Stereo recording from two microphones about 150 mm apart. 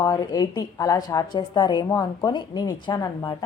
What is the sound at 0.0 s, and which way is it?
A woman's voice, 25° left (ahead or behind).